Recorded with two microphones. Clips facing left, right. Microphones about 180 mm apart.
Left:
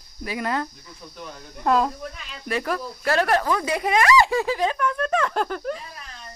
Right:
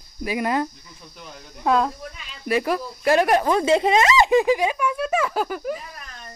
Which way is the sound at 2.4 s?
10° right (ahead or behind).